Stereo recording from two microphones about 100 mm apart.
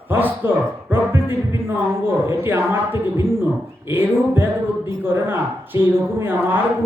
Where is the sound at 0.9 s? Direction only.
20° right (ahead or behind).